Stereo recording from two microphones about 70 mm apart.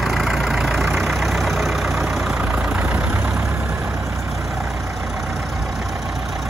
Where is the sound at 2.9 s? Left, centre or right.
Right.